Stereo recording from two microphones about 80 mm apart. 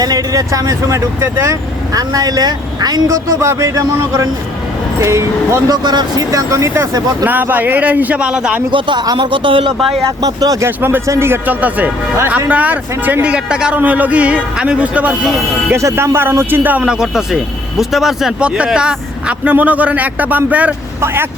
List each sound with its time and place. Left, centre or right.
0.0 s speech: right
2.0 s speech: right
3.1 s speech: right
4.9 s speech: right
5.7 s speech: right
7.3 s speech: right
8.7 s speech: right
10.2 s speech: right
10.7 s speech: right
11.0 s speech: right; by 15.1 s centre
15.7 s speech: right; by 20.7 s centre
21.0 s speech: right